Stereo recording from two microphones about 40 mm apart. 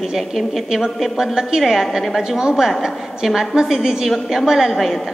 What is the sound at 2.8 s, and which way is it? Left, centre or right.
A woman's voice, centre.